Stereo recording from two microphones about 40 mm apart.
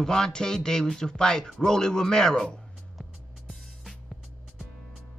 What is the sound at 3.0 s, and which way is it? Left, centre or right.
Music, centre.